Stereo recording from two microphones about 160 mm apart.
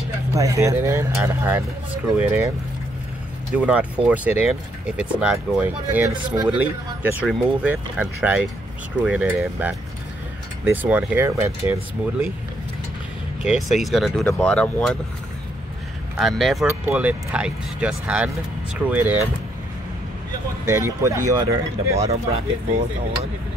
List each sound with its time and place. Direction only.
0.3 s speech: 20° right (ahead or behind)
3.5 s speech: 10° right (ahead or behind)
6.1 s speech: 30° right (ahead or behind)
6.6 s speech: 10° right (ahead or behind)
13.4 s speech: centre (ahead or behind)
16.2 s speech: centre (ahead or behind)
16.6 s speech: 10° right (ahead or behind)
20.6 s speech: 15° right (ahead or behind)